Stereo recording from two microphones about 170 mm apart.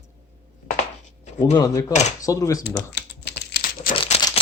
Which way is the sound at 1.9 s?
40° left (ahead or behind).